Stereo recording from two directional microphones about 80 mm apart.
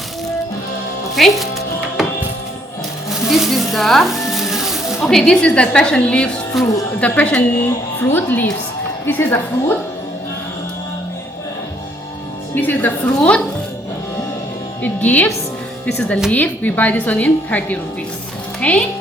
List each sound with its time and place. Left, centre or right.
1.1 s speech: centre
3.1 s sizzle: centre
6.6 s a woman's voice: centre
7.0 s a woman's voice: centre
12.5 s a woman's voice: left
13.1 s a woman's voice: centre
14.8 s a woman's voice: left
16.3 s a woman's voice: left